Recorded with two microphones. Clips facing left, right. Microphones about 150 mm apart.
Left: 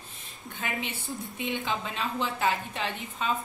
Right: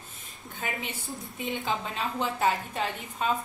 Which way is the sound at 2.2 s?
40° right (ahead or behind).